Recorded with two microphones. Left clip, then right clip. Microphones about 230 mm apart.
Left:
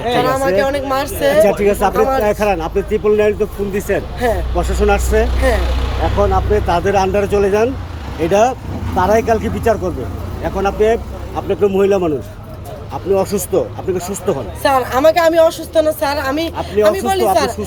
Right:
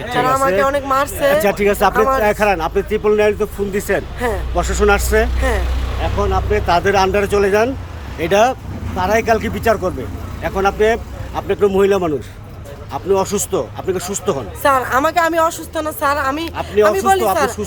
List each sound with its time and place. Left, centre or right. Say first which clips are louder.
0.2 s speech: right 2 dB; centre
12.9 s speech: left 1 dB; right
13.2 s speech: left 3 dB; centre